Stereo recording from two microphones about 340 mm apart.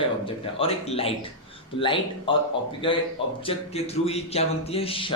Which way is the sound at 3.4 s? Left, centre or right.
Centre.